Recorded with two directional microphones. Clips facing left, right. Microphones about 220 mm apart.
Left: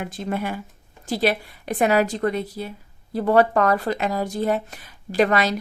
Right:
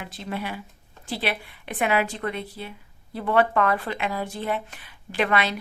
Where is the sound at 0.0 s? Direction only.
50° left (ahead or behind).